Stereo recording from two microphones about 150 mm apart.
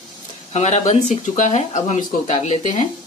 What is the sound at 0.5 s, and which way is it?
Speech, 50° left (ahead or behind).